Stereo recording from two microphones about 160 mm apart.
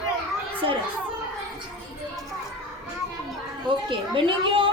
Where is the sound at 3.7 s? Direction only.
30° right (ahead or behind).